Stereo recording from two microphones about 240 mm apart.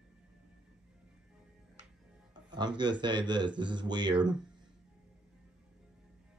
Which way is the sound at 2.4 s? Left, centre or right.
Centre.